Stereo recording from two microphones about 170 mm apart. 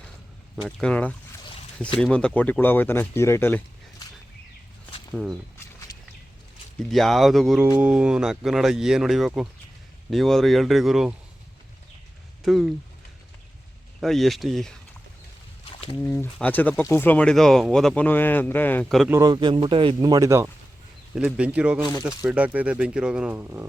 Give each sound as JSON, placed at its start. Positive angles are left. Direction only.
{"t": 0.8, "sound": "speech", "side_deg": 5}
{"t": 5.1, "sound": "speech", "side_deg": 0}
{"t": 6.9, "sound": "speech", "side_deg": 0}
{"t": 14.0, "sound": "speech", "side_deg": 0}
{"t": 16.0, "sound": "speech", "side_deg": 10}
{"t": 19.0, "sound": "speech", "side_deg": -15}
{"t": 19.3, "sound": "speech", "side_deg": -30}
{"t": 21.2, "sound": "speech", "side_deg": -5}